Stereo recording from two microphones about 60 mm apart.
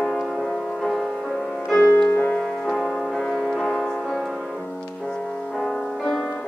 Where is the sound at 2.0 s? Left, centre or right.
Left.